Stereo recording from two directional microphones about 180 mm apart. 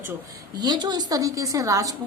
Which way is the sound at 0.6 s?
25° right (ahead or behind).